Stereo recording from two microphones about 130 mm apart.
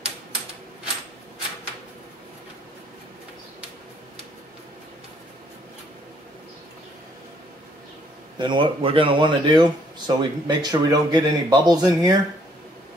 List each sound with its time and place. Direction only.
8.4 s speech: 40° right (ahead or behind)